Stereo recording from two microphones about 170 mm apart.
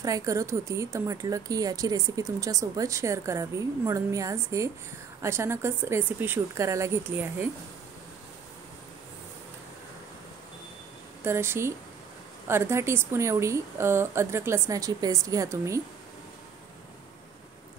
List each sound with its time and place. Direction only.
0.0 s a woman's voice: 20° right (ahead or behind)
11.2 s a woman's voice: 15° right (ahead or behind)